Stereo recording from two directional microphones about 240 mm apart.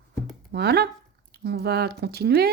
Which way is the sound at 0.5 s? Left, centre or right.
Right.